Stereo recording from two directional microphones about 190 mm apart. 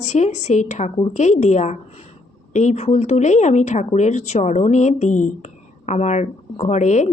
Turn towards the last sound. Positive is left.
turn(degrees=40)  # may be behind; listen again after turning